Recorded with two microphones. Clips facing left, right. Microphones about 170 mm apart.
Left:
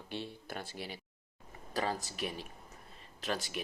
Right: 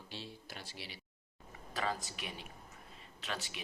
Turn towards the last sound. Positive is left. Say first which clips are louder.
# left 6 dB
turn(degrees=40)  # may be behind; listen again after turning